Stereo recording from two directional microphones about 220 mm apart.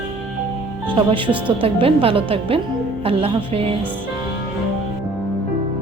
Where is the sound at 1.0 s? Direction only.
25° right (ahead or behind).